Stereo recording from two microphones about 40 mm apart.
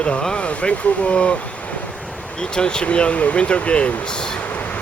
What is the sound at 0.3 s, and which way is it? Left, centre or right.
Speech, left.